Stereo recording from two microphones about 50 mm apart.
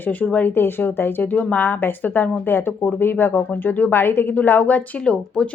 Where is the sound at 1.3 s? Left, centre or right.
Left.